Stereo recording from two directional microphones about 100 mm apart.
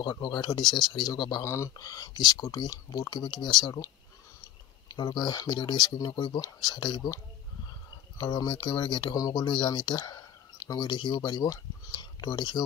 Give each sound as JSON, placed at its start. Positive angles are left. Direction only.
{"t": 0.0, "sound": "speech", "side_deg": 45}
{"t": 1.4, "sound": "speech", "side_deg": 30}
{"t": 8.2, "sound": "speech", "side_deg": 40}
{"t": 9.1, "sound": "speech", "side_deg": 40}
{"t": 10.0, "sound": "a sound", "side_deg": 35}
{"t": 10.9, "sound": "speech", "side_deg": 50}